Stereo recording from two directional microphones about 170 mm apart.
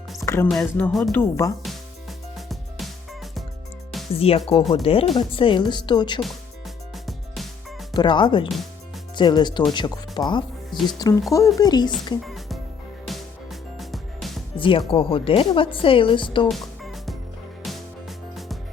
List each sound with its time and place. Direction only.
0.5 s music: centre (ahead or behind)
1.1 s speech: 15° left (ahead or behind)
1.6 s music: centre (ahead or behind)
4.1 s speech: 35° left (ahead or behind)
6.9 s music: centre (ahead or behind)
7.9 s speech: 30° left (ahead or behind)
12.2 s music: centre (ahead or behind)
14.5 s speech: 30° left (ahead or behind)
16.5 s music: centre (ahead or behind)